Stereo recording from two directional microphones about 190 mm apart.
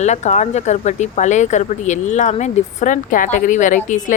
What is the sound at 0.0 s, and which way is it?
Speech, 35° left (ahead or behind).